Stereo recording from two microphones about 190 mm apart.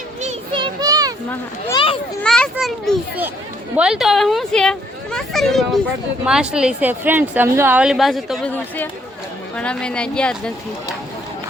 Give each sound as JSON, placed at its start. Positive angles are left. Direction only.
{"t": 0.2, "sound": "a sound", "side_deg": -30}
{"t": 1.7, "sound": "children playing", "side_deg": 30}
{"t": 2.2, "sound": "children playing", "side_deg": 5}
{"t": 3.8, "sound": "a woman's voice", "side_deg": -5}